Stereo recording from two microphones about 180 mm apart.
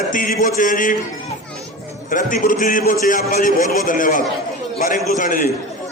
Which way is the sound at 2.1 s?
45° left (ahead or behind).